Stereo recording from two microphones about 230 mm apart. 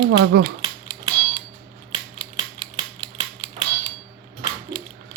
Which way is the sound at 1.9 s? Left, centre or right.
Right.